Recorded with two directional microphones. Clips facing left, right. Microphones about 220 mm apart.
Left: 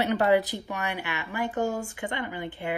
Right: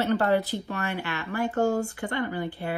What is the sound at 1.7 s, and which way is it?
Speech, 40° right (ahead or behind).